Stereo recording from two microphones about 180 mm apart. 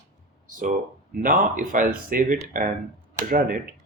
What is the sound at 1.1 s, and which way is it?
Speech, 50° right (ahead or behind).